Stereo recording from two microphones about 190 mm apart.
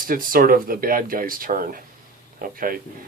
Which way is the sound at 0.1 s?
50° right (ahead or behind).